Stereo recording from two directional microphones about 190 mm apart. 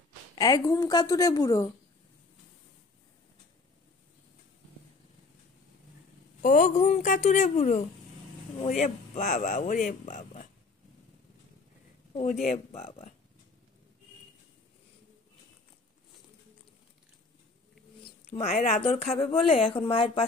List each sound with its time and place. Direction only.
0.4 s a woman's voice: 20° left (ahead or behind)
6.4 s a woman's voice: 40° left (ahead or behind)
12.1 s a woman's voice: 35° left (ahead or behind)
18.3 s a woman's voice: 35° left (ahead or behind)